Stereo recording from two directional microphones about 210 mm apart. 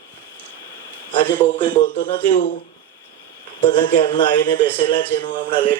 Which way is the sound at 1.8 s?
25° left (ahead or behind).